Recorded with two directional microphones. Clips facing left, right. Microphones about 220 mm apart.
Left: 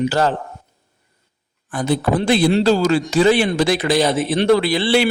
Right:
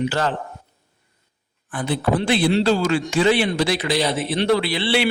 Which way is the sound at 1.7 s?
40° left (ahead or behind).